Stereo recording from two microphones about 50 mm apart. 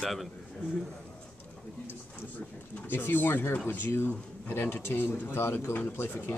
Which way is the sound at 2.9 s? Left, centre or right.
Left.